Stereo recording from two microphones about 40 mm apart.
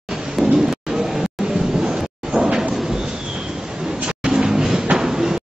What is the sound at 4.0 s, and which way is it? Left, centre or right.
Music, right.